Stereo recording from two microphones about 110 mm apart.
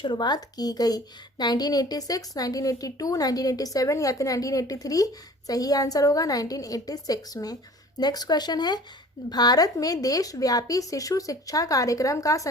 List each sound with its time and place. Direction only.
0.0 s a woman's voice: 45° left (ahead or behind)